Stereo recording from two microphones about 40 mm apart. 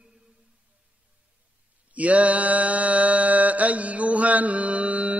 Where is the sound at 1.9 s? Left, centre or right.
Right.